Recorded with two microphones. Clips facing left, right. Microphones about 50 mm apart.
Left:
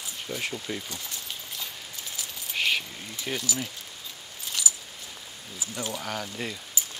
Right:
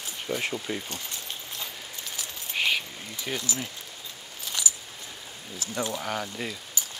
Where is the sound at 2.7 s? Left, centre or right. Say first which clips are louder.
Even; centre.